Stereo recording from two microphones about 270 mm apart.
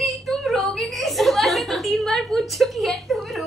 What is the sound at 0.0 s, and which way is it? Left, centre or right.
Chuckle, centre.